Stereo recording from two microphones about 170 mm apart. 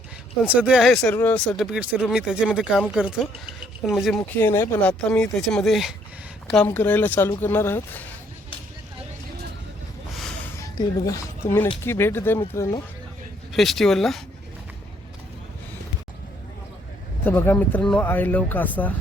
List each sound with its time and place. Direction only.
0.4 s speech: 5° right (ahead or behind); by 1.4 s 10° left (ahead or behind)
1.5 s speech: 5° right (ahead or behind)
3.8 s speech: centre (ahead or behind)
4.2 s speech: 15° left (ahead or behind)
10.1 s a sound: centre (ahead or behind)
10.6 s speech: 20° left (ahead or behind)
13.5 s speech: centre (ahead or behind)
17.2 s speech: 10° left (ahead or behind)